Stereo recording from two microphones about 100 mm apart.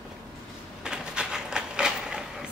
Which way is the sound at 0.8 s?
10° right (ahead or behind).